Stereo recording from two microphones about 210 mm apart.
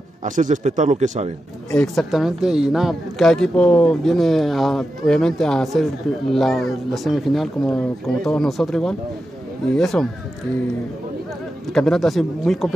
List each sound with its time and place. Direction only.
0.2 s a man's voice: 35° right (ahead or behind)
1.7 s speech: 5° left (ahead or behind)
11.7 s speech: centre (ahead or behind)